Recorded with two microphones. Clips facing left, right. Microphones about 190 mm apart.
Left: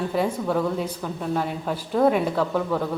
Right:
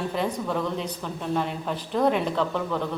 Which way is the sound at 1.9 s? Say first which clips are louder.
Left 3 dB; 5° left (ahead or behind).